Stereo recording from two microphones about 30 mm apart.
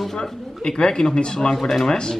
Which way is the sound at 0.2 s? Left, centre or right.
Left.